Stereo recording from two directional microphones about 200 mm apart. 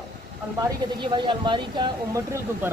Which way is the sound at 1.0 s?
25° right (ahead or behind).